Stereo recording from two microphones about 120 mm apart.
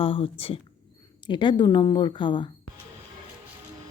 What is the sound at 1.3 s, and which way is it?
A woman's voice, 40° left (ahead or behind).